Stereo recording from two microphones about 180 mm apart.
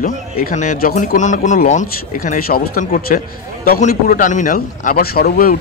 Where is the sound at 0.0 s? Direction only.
50° left (ahead or behind).